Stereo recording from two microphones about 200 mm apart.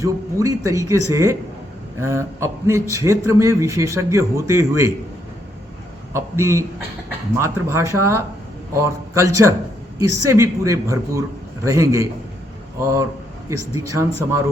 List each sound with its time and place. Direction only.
0.0 s a man's voice: 15° right (ahead or behind)
6.1 s a man's voice: 15° right (ahead or behind)
13.5 s a man's voice: 15° right (ahead or behind)